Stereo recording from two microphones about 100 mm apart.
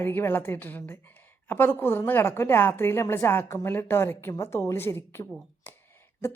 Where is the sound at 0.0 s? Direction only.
20° left (ahead or behind).